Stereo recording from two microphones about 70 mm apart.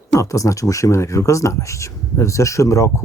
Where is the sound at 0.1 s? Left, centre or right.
Left.